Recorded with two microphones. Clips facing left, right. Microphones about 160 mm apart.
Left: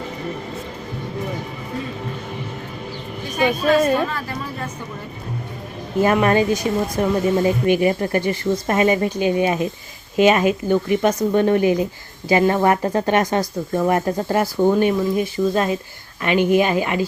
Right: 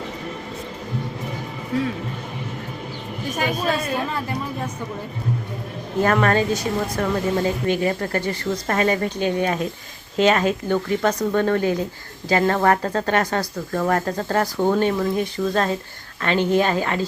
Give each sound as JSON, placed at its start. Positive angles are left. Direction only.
{"t": 6.0, "sound": "speech", "side_deg": 10}